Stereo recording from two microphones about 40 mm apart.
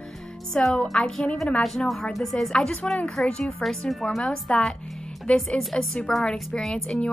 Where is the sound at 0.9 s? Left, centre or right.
Centre.